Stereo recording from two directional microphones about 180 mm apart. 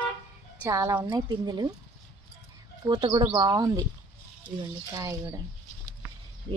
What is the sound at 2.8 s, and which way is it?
Speech, 25° right (ahead or behind).